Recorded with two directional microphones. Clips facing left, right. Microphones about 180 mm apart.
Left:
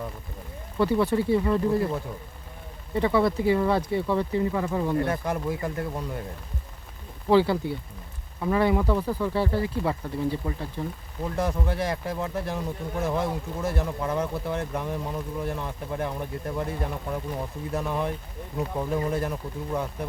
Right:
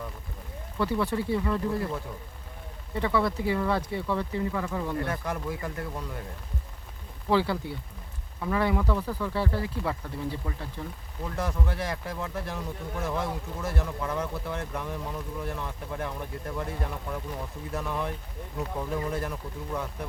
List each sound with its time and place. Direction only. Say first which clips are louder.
0.8 s speech: left 5 dB; 20° left (ahead or behind)
7.3 s speech: left 5 dB; 20° left (ahead or behind)